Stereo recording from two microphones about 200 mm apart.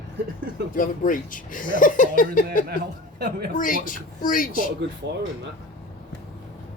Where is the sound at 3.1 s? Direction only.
50° right (ahead or behind).